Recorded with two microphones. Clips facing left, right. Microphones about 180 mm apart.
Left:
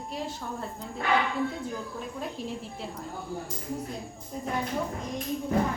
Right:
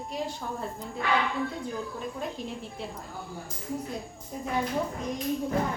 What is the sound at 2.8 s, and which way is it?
Speech, centre (ahead or behind).